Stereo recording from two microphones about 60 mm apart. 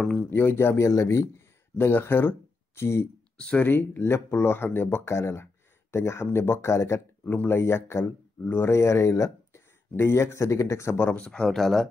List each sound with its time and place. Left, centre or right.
0.0 s a sound: centre
0.3 s speech: left
3.3 s speech: centre
3.6 s speech: left
7.2 s speech: left
8.6 s speech: left
11.0 s speech: left
11.2 s speech: centre
11.5 s speech: centre